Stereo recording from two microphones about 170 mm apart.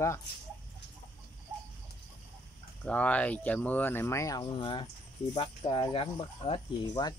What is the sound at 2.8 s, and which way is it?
Speech, 10° left (ahead or behind).